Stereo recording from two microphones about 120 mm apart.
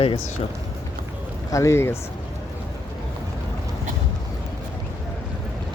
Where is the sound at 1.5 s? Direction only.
25° left (ahead or behind).